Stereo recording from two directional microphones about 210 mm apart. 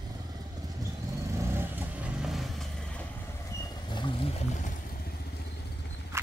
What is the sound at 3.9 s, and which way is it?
Pour, 20° left (ahead or behind).